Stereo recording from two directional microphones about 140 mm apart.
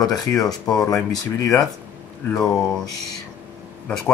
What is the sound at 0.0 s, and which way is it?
Speech, 25° left (ahead or behind).